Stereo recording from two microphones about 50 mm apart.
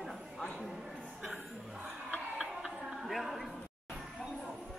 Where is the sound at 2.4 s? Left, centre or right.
Centre.